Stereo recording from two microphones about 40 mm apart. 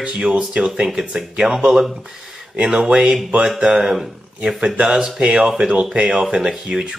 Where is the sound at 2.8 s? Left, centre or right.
Centre.